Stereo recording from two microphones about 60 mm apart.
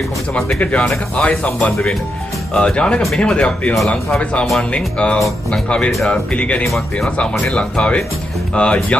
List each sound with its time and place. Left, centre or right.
0.7 s speech: centre
6.6 s speech: centre
7.5 s speech: centre